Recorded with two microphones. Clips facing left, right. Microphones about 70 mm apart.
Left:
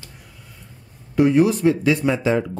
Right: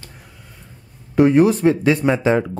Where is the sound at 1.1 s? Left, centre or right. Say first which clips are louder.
Right 3 dB; right.